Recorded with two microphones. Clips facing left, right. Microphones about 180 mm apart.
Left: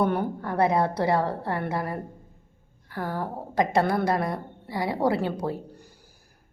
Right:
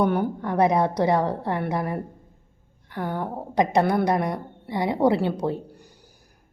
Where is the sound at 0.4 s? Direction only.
15° right (ahead or behind).